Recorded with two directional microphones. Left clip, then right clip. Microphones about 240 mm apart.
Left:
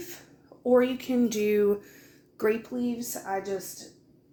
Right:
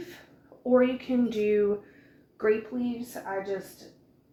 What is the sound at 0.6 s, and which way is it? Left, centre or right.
Speech, left.